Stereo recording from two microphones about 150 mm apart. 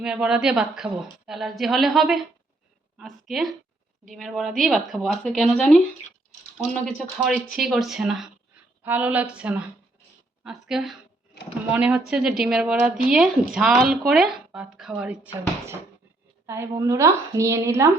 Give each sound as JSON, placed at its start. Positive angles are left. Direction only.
{"t": 0.0, "sound": "speech", "side_deg": -5}
{"t": 6.8, "sound": "a woman's voice", "side_deg": 0}
{"t": 16.5, "sound": "a woman's voice", "side_deg": -20}